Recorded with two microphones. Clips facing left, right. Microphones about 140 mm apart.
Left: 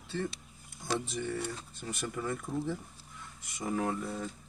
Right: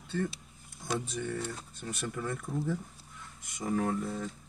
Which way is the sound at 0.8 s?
Centre (ahead or behind).